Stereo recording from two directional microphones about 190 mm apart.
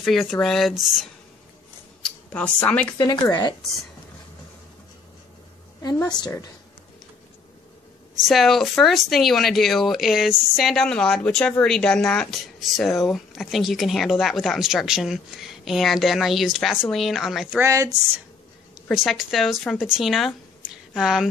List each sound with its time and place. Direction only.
0.0 s speech: centre (ahead or behind)
2.0 s speech: 5° left (ahead or behind)
3.0 s a woman's voice: 20° left (ahead or behind)
5.8 s a sound: 15° left (ahead or behind)
6.1 s a woman's voice: 20° left (ahead or behind)
8.2 s speech: centre (ahead or behind); by 17.9 s 15° right (ahead or behind)
18.8 s speech: centre (ahead or behind)